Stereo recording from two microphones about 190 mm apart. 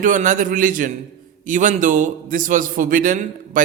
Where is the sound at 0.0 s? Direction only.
40° right (ahead or behind).